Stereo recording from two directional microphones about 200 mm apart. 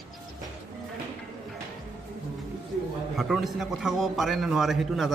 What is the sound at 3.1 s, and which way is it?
A man's voice, centre (ahead or behind).